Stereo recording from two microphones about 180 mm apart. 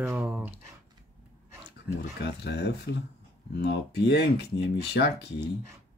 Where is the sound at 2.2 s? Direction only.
65° left (ahead or behind).